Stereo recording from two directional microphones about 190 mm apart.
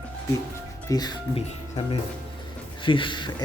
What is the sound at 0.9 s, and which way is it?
Speech, 20° left (ahead or behind).